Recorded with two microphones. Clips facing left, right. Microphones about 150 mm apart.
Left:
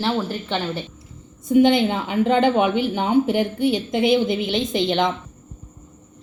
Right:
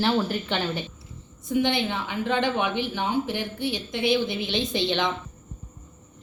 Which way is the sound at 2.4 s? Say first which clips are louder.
Left 6 dB; 50° left (ahead or behind).